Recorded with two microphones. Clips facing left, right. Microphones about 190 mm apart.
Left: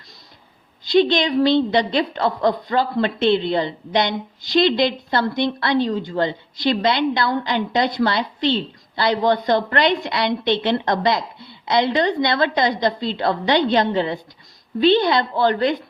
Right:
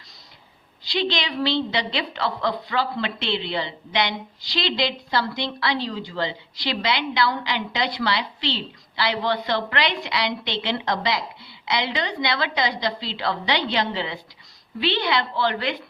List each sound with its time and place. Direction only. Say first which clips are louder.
0.9 s a woman's voice: left 9 dB; 50° left (ahead or behind)